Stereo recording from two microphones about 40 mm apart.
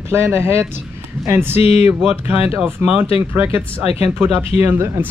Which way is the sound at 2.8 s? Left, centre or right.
Right.